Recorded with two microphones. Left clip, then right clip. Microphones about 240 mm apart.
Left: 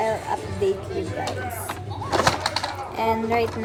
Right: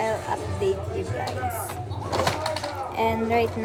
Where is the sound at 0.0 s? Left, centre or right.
Centre.